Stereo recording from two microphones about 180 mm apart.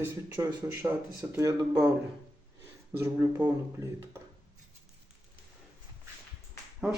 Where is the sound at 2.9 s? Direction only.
15° right (ahead or behind).